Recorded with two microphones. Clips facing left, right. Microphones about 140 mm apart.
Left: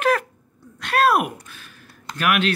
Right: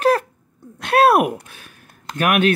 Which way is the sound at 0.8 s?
55° right (ahead or behind).